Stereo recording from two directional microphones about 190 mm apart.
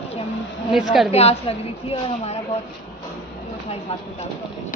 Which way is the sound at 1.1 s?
30° left (ahead or behind).